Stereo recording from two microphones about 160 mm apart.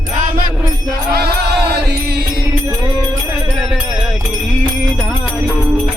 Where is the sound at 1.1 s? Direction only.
85° right.